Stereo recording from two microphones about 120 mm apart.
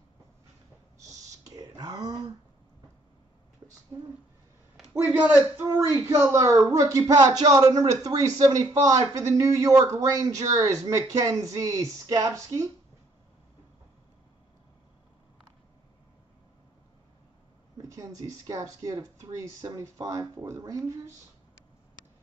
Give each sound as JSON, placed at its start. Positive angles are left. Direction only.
{"t": 1.6, "sound": "whispering", "side_deg": -35}
{"t": 3.9, "sound": "speech", "side_deg": -35}
{"t": 4.9, "sound": "a man's voice", "side_deg": -15}
{"t": 5.9, "sound": "speech", "side_deg": -25}
{"t": 17.8, "sound": "speech", "side_deg": -30}